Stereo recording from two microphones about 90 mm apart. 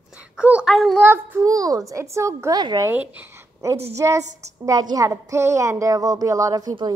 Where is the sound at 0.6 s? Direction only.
Centre (ahead or behind).